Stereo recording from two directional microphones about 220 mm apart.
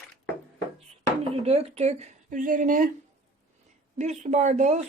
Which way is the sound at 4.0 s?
30° right (ahead or behind).